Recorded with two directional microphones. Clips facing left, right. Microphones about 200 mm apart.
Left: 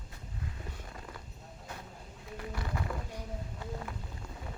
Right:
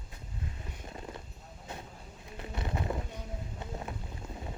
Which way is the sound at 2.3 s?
25° right (ahead or behind).